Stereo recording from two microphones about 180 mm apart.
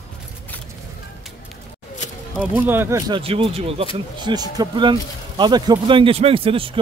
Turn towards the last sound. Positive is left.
turn(degrees=-30)  # may be behind; listen again after turning